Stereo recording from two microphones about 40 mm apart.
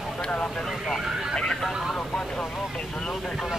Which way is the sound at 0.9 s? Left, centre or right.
Centre.